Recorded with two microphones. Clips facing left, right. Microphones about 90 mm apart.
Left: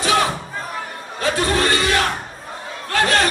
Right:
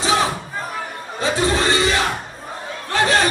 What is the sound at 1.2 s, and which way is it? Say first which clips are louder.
Battle cry: even; 20° right (ahead or behind).